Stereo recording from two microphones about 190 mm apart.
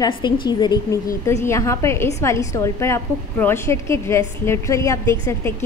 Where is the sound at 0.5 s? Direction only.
20° left (ahead or behind).